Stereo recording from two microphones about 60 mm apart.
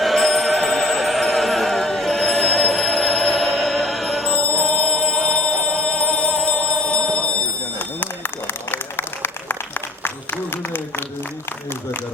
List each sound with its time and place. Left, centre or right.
0.0 s music: centre
4.4 s music: centre
7.8 s run: left
8.7 s applause: left
10.0 s a sound: left